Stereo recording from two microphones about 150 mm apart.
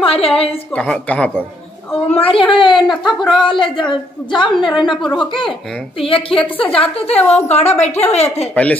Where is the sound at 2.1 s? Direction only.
35° left (ahead or behind).